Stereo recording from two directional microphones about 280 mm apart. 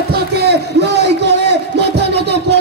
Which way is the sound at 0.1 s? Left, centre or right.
Right.